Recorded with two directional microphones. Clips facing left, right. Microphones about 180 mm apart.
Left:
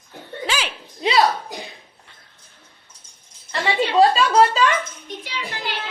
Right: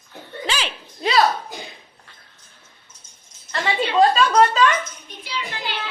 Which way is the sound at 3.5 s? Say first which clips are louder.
Left 1 dB; 25° left (ahead or behind).